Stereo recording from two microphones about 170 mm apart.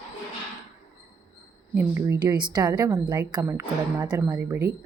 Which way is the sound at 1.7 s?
15° right (ahead or behind).